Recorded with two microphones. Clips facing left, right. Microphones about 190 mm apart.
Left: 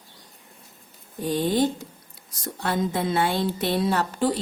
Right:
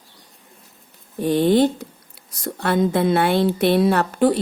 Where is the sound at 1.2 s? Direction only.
65° right (ahead or behind).